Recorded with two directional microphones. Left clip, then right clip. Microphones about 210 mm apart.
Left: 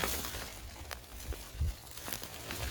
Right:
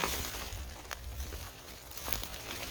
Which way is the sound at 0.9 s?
25° left (ahead or behind).